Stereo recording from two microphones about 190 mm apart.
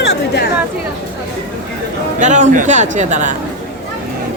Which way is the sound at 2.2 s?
40° right (ahead or behind).